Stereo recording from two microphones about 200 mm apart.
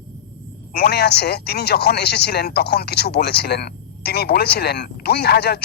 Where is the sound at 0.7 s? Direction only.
55° left (ahead or behind).